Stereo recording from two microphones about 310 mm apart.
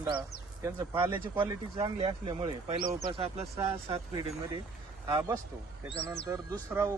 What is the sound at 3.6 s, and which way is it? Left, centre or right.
Speech, centre.